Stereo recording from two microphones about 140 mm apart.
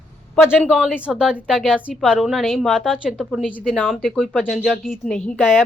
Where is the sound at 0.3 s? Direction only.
5° right (ahead or behind).